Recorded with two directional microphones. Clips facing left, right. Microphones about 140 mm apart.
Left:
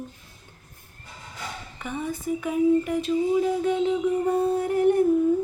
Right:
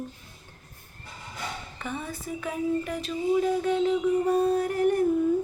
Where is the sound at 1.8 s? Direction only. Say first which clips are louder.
Left 6 dB; 15° left (ahead or behind).